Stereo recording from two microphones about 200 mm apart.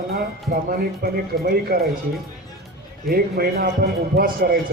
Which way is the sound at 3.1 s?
50° right (ahead or behind).